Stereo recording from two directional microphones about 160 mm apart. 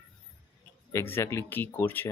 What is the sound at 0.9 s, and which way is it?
Speech, 15° left (ahead or behind).